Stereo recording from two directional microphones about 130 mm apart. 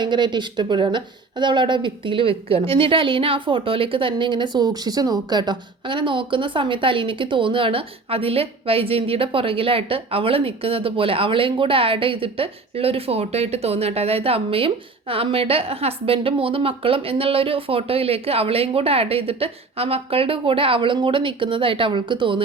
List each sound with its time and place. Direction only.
0.0 s speech: 35° right (ahead or behind)